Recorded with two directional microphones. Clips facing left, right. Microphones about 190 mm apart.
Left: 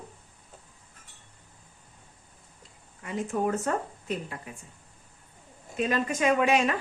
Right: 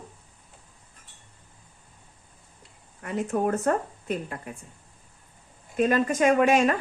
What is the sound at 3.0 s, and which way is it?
Speech, 55° right (ahead or behind).